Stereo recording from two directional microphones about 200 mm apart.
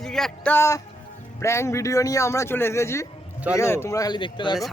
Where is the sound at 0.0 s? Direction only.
Centre (ahead or behind); by 4.5 s 25° left (ahead or behind).